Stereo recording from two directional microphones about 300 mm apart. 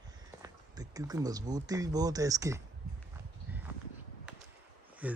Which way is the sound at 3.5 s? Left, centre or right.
Centre.